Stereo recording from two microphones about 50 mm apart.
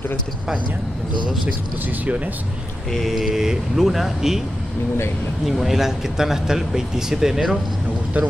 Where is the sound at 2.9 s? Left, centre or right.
Centre.